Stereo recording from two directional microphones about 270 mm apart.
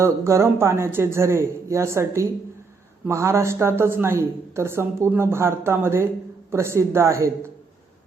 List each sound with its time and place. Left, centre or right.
0.0 s a woman's voice: centre